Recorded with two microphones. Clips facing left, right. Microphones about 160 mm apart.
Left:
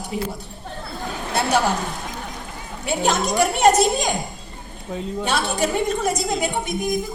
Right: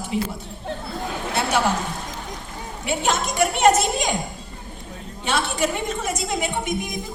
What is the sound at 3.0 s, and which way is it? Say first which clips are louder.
Speech: left 3 dB; 35° left (ahead or behind).